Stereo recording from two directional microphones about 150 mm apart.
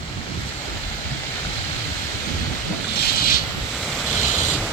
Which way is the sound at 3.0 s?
90° left.